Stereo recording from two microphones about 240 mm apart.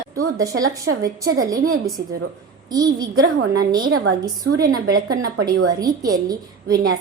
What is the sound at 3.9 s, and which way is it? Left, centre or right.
Speech, right.